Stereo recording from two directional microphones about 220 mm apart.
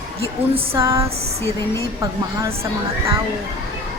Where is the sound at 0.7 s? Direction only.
15° right (ahead or behind).